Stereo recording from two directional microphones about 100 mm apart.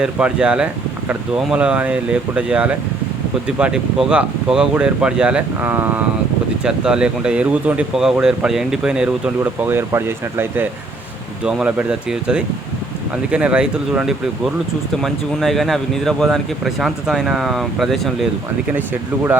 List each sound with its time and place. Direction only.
0.0 s speech: 10° right (ahead or behind)
6.7 s speech: 10° right (ahead or behind)
9.0 s speech: 20° right (ahead or behind)
11.4 s speech: 10° right (ahead or behind)